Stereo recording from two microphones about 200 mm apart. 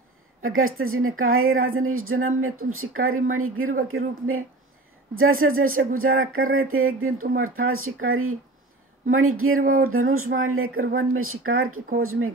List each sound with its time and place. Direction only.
0.4 s a woman's voice: 90° right
9.6 s speech: 45° right (ahead or behind)
9.8 s a woman's voice: 90° right